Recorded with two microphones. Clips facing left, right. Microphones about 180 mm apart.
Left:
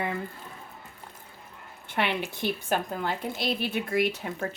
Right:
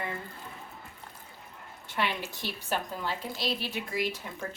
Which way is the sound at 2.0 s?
60° left (ahead or behind).